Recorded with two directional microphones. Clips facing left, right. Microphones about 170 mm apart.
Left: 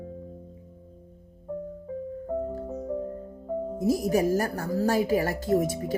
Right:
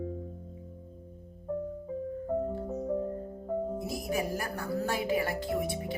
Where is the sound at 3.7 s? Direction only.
40° left (ahead or behind).